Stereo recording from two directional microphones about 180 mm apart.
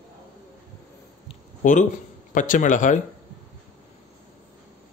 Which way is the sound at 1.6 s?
45° left (ahead or behind).